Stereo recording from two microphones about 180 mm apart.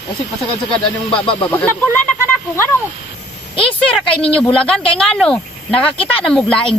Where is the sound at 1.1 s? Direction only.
30° left (ahead or behind).